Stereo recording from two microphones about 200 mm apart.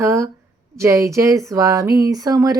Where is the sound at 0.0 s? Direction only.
15° right (ahead or behind).